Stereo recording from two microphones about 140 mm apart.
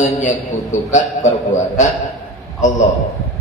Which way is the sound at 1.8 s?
60° left (ahead or behind).